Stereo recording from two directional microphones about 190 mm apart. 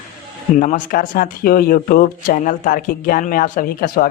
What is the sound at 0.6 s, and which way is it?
Speech, 45° left (ahead or behind).